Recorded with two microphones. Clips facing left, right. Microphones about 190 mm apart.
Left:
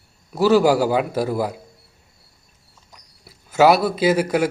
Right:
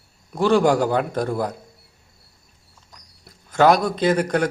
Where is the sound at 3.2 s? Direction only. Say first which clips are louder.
Left 1 dB; 5° left (ahead or behind).